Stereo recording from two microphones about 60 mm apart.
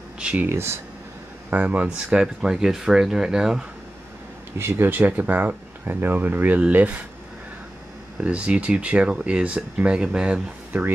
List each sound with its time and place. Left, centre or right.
0.5 s speech: right
1.5 s speech: right; by 3.6 s centre
4.6 s speech: right
8.2 s speech: right
10.7 s speech: right